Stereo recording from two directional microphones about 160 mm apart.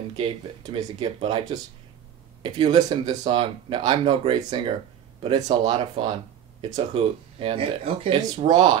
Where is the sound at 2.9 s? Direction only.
30° right (ahead or behind).